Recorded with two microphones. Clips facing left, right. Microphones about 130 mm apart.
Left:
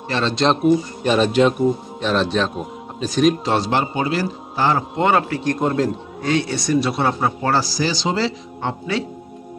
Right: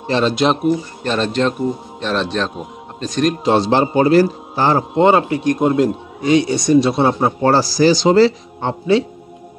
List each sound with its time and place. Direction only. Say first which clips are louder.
0.2 s a man's voice: right 1 dB; 10° right (ahead or behind)
1.0 s a man's voice: left 2 dB; 10° left (ahead or behind)
3.4 s a man's voice: right 5 dB; 25° right (ahead or behind)
3.9 s a man's voice: right 9 dB; 45° right (ahead or behind)
5.0 s a man's voice: right 5 dB; 20° right (ahead or behind); by 8.3 s 50° right (ahead or behind)
8.5 s a man's voice: right 8 dB; 25° right (ahead or behind)